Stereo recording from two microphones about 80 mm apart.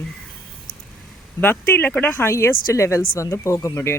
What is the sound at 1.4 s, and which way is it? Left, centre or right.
Speech, left.